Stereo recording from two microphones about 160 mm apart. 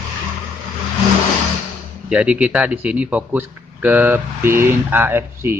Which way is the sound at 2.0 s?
10° right (ahead or behind).